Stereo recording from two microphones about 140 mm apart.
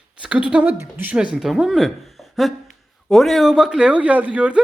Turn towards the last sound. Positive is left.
turn(degrees=-10)  # may be behind; listen again after turning